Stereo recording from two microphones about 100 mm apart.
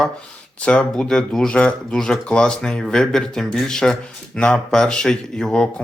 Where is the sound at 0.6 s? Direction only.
10° left (ahead or behind).